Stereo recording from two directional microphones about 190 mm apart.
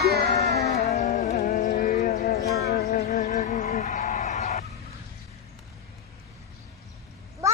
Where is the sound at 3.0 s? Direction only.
40° left (ahead or behind).